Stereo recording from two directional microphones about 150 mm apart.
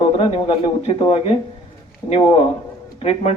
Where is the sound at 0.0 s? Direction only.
40° left (ahead or behind).